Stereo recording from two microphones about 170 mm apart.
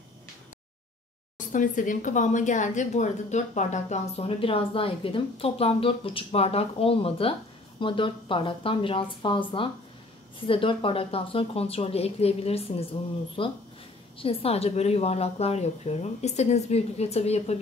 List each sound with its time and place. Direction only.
1.5 s a woman's voice: 50° left (ahead or behind)